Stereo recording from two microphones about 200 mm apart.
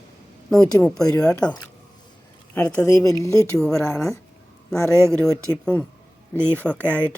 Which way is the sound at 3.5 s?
5° left (ahead or behind).